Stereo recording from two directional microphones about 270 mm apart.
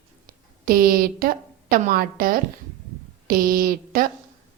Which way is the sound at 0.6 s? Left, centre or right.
Right.